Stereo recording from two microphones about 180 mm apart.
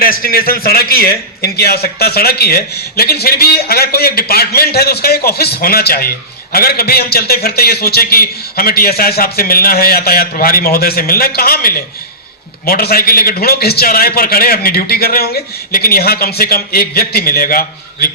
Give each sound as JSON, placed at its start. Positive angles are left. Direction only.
{"t": 0.0, "sound": "a man's voice", "side_deg": 55}